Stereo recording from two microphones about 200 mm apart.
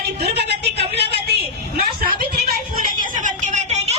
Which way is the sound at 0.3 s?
55° right (ahead or behind).